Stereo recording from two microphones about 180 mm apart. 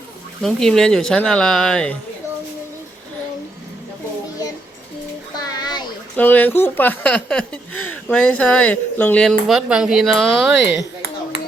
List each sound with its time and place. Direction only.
0.4 s speech: 5° left (ahead or behind)
5.4 s a sound: 20° left (ahead or behind)
6.1 s speech: 10° left (ahead or behind)
9.5 s speech: 5° right (ahead or behind)